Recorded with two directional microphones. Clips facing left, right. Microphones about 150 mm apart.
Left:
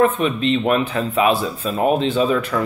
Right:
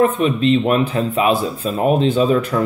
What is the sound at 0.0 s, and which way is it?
Speech, 40° right (ahead or behind).